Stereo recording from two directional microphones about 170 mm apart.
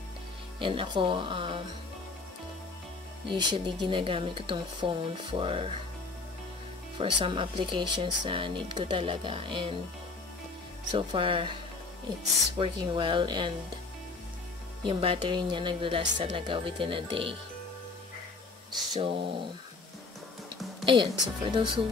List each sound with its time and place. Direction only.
0.6 s a woman's voice: 30° right (ahead or behind)
3.3 s a woman's voice: 30° right (ahead or behind)
7.0 s a woman's voice: 30° right (ahead or behind)
10.9 s a woman's voice: 30° right (ahead or behind)
12.5 s speech: 30° right (ahead or behind)
14.8 s a woman's voice: 30° right (ahead or behind)
18.9 s a woman's voice: 30° right (ahead or behind)
20.8 s speech: 30° right (ahead or behind)